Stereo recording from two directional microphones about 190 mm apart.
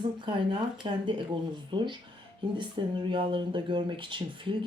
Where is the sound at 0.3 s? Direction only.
25° right (ahead or behind).